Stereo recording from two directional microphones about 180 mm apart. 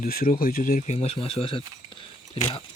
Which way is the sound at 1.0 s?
30° left (ahead or behind).